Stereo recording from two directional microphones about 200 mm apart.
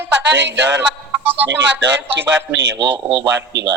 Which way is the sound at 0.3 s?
60° right (ahead or behind).